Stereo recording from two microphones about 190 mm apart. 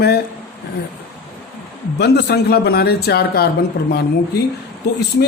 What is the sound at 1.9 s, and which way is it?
Speech, 60° left (ahead or behind).